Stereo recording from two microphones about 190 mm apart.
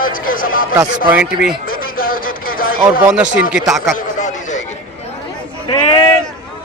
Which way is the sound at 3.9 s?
40° left (ahead or behind).